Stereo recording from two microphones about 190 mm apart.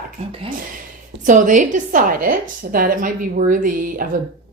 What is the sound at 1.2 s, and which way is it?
Speech, 40° right (ahead or behind).